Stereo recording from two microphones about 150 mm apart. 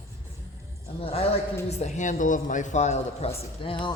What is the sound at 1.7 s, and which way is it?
A man's voice, 50° left (ahead or behind).